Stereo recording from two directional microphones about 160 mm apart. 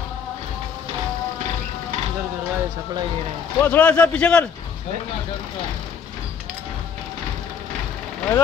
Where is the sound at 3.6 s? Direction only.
10° left (ahead or behind).